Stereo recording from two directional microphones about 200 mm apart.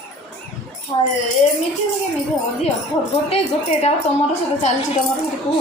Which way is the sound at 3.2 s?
30° left (ahead or behind).